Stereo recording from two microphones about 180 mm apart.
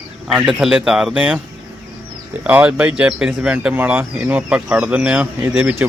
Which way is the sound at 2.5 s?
10° right (ahead or behind).